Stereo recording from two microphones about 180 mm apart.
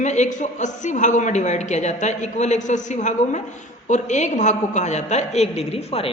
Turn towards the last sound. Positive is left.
turn(degrees=35)  # may be behind; listen again after turning